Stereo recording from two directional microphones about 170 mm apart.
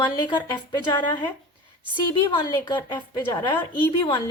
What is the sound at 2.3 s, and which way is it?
A woman's voice, 25° left (ahead or behind).